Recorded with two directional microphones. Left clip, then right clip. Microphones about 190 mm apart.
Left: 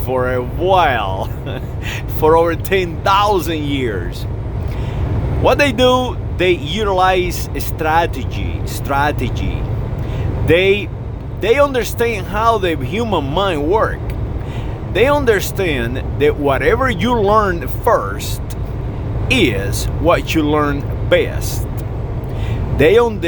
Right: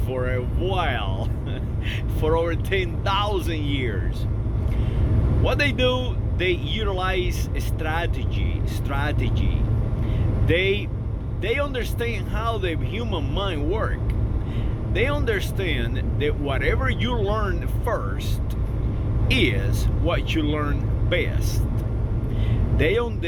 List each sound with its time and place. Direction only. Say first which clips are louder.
0.1 s speech: left 10 dB; 40° left (ahead or behind)
5.4 s speech: left 10 dB; 40° left (ahead or behind)
14.9 s speech: left 11 dB; 40° left (ahead or behind)
19.3 s speech: left 8 dB; 35° left (ahead or behind)
22.8 s speech: left 12 dB; 40° left (ahead or behind)